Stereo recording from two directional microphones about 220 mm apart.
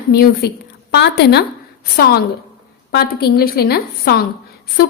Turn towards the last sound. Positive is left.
turn(degrees=45)  # may be behind; listen again after turning